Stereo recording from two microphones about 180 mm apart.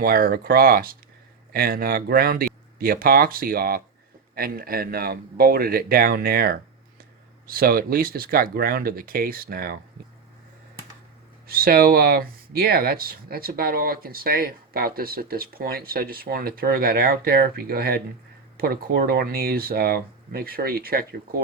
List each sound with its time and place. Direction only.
0.0 s speech: 50° right (ahead or behind)
11.4 s speech: 55° right (ahead or behind)